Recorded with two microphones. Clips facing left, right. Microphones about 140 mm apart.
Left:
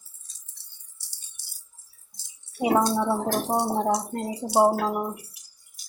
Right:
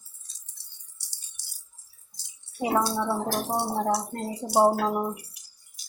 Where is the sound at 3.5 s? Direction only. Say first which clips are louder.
Left 2 dB; 20° left (ahead or behind).